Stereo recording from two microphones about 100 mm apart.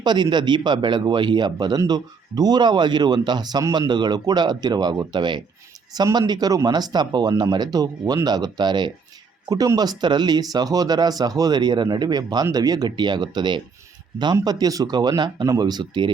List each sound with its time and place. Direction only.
0.0 s speech: 50° right (ahead or behind)